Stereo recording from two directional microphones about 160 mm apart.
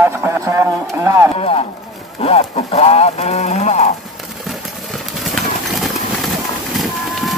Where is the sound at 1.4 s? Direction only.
35° left (ahead or behind).